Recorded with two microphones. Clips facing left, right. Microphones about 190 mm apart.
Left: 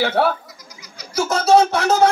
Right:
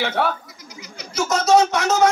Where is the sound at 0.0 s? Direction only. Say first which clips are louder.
Left 4 dB; 35° left (ahead or behind).